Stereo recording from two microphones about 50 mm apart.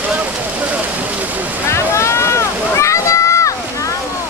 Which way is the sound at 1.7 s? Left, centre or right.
Left.